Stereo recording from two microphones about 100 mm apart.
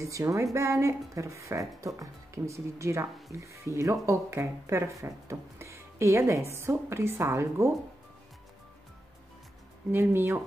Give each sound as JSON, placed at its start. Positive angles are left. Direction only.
{"t": 0.0, "sound": "speech", "side_deg": -30}
{"t": 9.8, "sound": "speech", "side_deg": -25}